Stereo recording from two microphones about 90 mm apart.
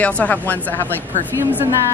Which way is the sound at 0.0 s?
15° left (ahead or behind).